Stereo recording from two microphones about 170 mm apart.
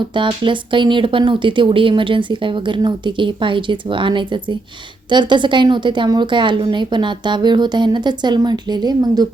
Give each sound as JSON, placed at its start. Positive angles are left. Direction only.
{"t": 0.0, "sound": "speech", "side_deg": -30}